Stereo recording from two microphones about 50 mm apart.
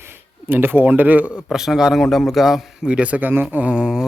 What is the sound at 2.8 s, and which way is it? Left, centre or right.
Speech, right.